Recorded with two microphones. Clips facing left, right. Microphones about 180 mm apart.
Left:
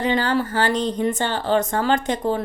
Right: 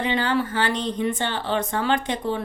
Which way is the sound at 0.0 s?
40° left (ahead or behind).